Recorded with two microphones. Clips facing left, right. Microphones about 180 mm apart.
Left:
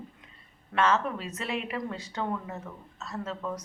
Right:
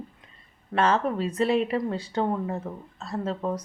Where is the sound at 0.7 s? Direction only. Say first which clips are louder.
Right 3 dB; 35° right (ahead or behind).